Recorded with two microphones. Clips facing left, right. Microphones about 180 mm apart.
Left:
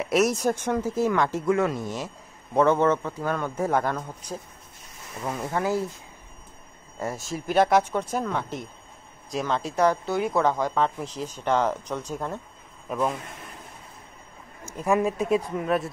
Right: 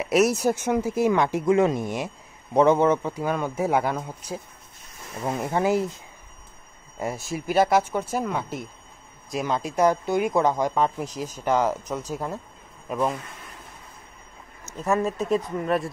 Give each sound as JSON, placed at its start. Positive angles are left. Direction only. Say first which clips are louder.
{"t": 0.0, "sound": "speech", "louder": "right 2 dB", "side_deg": -5}
{"t": 7.0, "sound": "speech", "louder": "right 2 dB", "side_deg": -10}
{"t": 14.7, "sound": "speech", "louder": "left 1 dB", "side_deg": 15}